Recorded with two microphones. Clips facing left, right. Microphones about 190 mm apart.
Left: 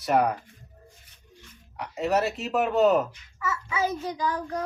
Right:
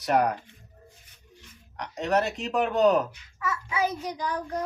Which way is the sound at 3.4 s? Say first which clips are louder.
Even; 15° right (ahead or behind).